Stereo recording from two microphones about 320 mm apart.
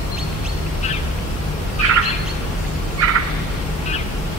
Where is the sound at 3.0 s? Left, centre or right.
Right.